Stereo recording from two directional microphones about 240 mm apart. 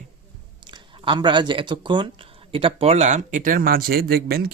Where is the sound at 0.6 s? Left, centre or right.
Centre.